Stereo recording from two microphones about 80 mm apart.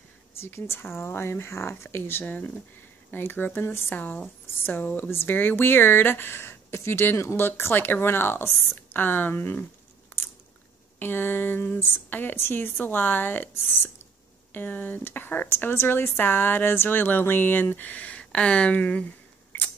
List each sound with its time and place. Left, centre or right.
0.4 s speech: left
11.0 s speech: left